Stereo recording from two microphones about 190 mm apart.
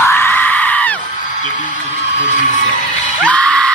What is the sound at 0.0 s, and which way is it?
Screaming, 15° left (ahead or behind).